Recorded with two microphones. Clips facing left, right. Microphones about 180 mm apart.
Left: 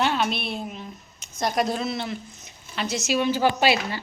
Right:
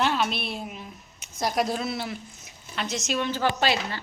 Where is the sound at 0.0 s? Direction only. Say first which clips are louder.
Left 1 dB; centre (ahead or behind).